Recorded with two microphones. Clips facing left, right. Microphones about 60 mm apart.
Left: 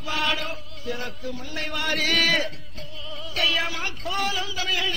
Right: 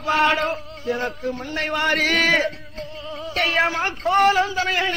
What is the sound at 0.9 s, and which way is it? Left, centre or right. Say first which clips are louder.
A man's voice: right 7 dB; right.